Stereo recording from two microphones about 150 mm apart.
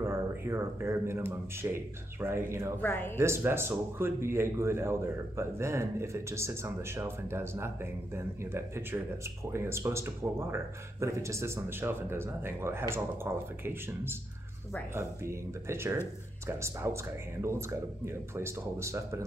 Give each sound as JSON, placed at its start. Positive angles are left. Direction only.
{"t": 0.0, "sound": "speech", "side_deg": -15}
{"t": 2.8, "sound": "speech", "side_deg": 15}
{"t": 3.2, "sound": "speech", "side_deg": -15}